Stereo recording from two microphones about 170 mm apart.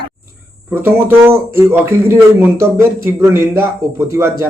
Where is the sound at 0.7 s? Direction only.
15° right (ahead or behind).